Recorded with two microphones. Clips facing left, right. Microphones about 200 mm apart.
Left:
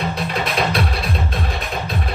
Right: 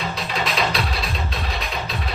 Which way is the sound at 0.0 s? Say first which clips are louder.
Left 3 dB; 55° left (ahead or behind).